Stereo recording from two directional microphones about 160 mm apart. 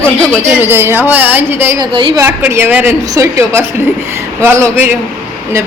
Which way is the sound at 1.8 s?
30° right (ahead or behind).